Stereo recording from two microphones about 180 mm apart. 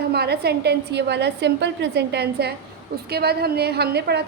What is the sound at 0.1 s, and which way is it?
A woman's voice, 65° right (ahead or behind).